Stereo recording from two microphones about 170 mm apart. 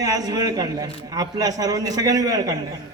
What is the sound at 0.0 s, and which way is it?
A man's voice, 20° right (ahead or behind).